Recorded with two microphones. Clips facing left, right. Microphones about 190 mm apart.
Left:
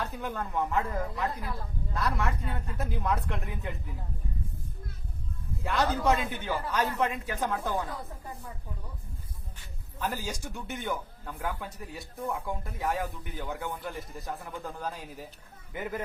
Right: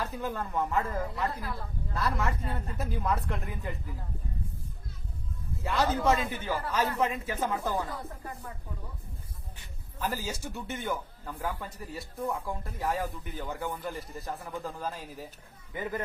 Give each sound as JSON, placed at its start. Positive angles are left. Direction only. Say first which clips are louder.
{"t": 0.0, "sound": "a man's voice", "louder": "right 1 dB", "side_deg": 0}
{"t": 5.6, "sound": "a man's voice", "louder": "even", "side_deg": 0}
{"t": 10.0, "sound": "a man's voice", "louder": "even", "side_deg": -5}